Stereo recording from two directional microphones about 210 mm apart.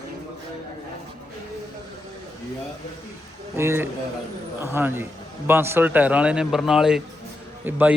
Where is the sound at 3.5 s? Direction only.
10° right (ahead or behind).